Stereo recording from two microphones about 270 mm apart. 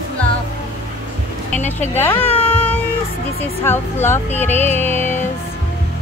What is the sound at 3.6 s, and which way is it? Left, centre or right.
Music, centre.